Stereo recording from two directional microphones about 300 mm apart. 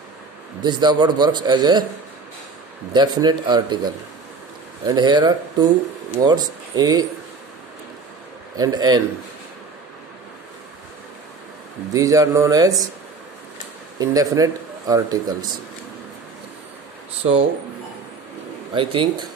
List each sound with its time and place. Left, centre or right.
0.6 s a man's voice: centre
2.9 s a man's voice: centre
8.5 s a man's voice: centre
11.9 s a man's voice: centre
13.9 s a man's voice: centre
18.7 s a man's voice: centre